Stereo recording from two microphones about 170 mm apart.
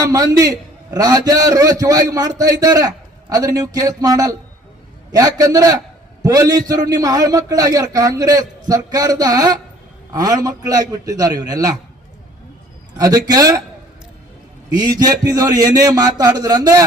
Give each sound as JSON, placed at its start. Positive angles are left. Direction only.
{"t": 0.1, "sound": "a man's voice", "side_deg": -20}
{"t": 13.0, "sound": "a man's voice", "side_deg": -20}
{"t": 14.7, "sound": "a man's voice", "side_deg": -20}